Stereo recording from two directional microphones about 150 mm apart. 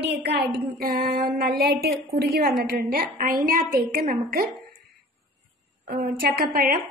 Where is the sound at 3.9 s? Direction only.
80° right.